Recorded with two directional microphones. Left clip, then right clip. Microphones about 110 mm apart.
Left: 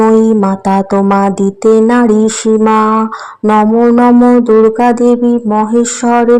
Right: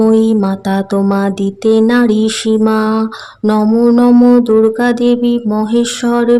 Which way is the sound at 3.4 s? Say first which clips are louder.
Left 3 dB; 5° right (ahead or behind).